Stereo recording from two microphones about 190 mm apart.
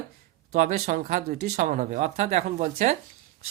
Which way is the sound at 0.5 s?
40° right (ahead or behind).